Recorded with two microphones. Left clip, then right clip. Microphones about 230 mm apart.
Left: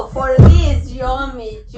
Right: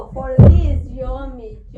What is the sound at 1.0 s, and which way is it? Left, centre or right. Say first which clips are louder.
Speech: left 12 dB; right.